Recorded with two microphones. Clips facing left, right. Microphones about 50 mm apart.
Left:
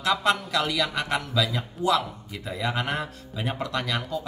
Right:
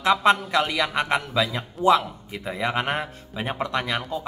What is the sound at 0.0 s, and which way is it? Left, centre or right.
A man's voice, right.